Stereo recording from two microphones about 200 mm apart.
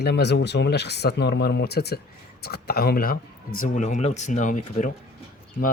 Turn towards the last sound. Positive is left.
turn(degrees=45)  # may be behind; listen again after turning